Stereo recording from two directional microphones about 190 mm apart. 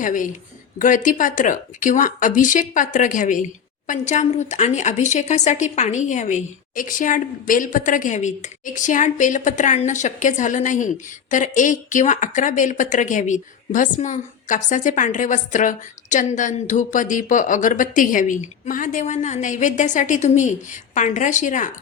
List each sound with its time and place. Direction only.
0.0 s speech: 45° left (ahead or behind)